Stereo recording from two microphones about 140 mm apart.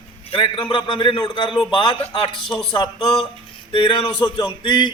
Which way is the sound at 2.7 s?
35° left (ahead or behind).